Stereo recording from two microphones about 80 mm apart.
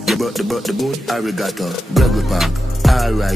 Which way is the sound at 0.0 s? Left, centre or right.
Centre.